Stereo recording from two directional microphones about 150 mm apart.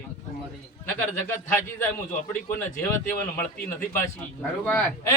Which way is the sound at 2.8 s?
10° left (ahead or behind).